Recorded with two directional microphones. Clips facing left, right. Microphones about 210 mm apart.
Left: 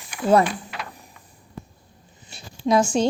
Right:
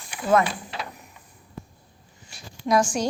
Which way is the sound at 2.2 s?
25° left (ahead or behind).